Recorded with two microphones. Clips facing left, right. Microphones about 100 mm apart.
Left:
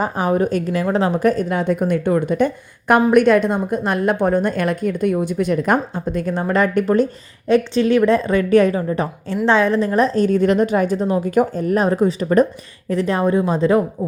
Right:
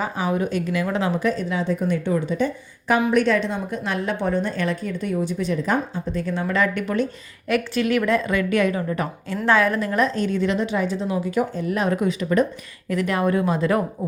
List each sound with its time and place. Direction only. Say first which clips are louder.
0.0 s a woman's voice: left 5 dB; 45° left (ahead or behind); by 13.8 s 25° left (ahead or behind)